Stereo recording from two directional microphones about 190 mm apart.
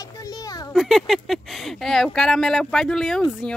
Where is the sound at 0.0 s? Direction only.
20° left (ahead or behind).